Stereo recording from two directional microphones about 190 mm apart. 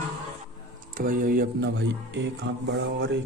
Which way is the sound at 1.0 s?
50° right (ahead or behind).